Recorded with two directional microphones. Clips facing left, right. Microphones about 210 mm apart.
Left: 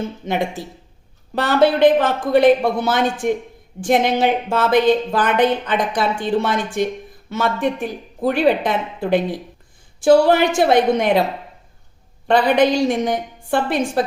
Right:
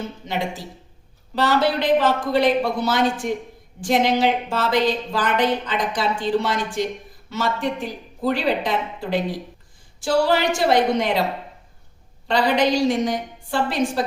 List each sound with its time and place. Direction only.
0.3 s a woman's voice: 55° left (ahead or behind)
12.3 s a woman's voice: 55° left (ahead or behind)